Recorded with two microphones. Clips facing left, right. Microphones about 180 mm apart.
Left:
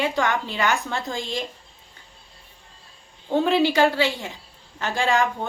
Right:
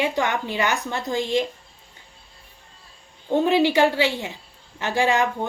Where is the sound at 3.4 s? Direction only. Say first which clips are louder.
Right 1 dB; 15° right (ahead or behind).